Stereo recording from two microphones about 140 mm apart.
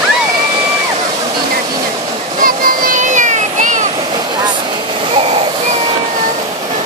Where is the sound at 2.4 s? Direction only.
90° right; by 3.8 s 60° right (ahead or behind).